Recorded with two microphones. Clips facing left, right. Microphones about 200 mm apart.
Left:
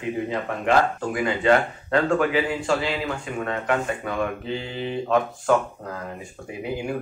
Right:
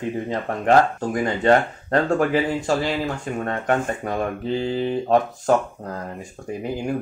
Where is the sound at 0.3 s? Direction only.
40° right (ahead or behind).